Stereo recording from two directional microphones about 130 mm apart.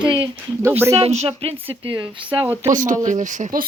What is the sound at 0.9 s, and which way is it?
Speech, 55° right (ahead or behind).